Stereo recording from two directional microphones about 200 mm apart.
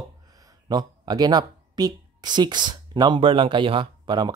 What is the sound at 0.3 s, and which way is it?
A man's voice, 20° right (ahead or behind).